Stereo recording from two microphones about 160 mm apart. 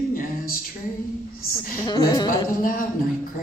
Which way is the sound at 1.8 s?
30° left (ahead or behind).